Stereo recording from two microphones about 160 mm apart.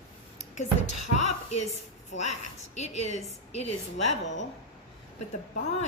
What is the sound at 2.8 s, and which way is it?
A woman's voice, 45° left (ahead or behind).